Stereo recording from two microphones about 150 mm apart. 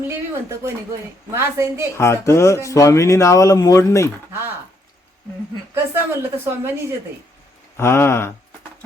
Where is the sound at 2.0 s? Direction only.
20° left (ahead or behind).